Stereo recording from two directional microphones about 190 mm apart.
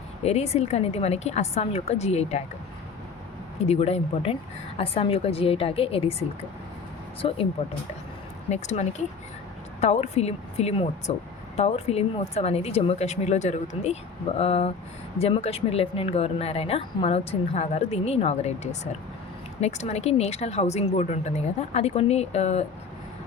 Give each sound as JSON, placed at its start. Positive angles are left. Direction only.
{"t": 0.3, "sound": "a woman's voice", "side_deg": 35}
{"t": 3.6, "sound": "a woman's voice", "side_deg": 35}
{"t": 8.4, "sound": "a woman's voice", "side_deg": 35}